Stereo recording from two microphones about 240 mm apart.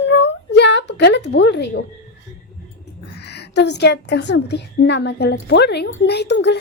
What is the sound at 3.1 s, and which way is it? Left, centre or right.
A woman's voice, left.